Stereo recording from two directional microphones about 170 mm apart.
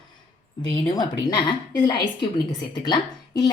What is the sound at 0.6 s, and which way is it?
A woman's voice, 25° left (ahead or behind).